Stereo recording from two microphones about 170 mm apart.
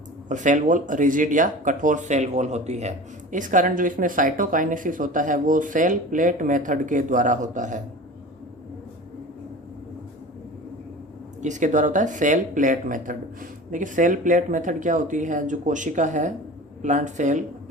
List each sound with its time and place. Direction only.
0.3 s speech: 45° right (ahead or behind)
11.4 s speech: 45° right (ahead or behind)